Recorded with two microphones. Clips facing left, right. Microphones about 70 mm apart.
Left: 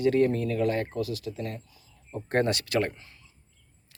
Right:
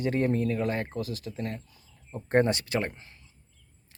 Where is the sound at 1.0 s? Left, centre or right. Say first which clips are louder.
Left 2 dB; right.